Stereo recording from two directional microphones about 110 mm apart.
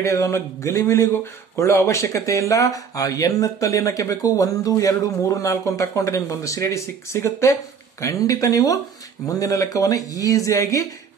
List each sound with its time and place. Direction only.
0.0 s speech: 25° left (ahead or behind)